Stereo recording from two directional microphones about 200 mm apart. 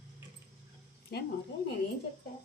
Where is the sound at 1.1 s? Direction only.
55° left (ahead or behind).